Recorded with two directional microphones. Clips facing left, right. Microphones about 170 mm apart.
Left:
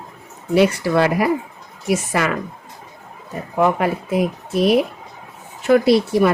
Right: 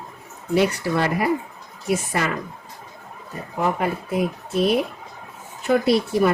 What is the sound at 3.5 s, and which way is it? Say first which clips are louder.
Speech: left 5 dB; 90° left.